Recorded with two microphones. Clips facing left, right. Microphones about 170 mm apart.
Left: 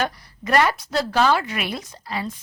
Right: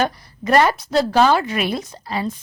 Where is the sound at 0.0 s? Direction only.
25° right (ahead or behind).